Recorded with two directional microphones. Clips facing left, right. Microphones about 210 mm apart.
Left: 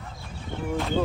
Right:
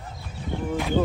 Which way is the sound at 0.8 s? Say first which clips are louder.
Right 2 dB; 5° right (ahead or behind).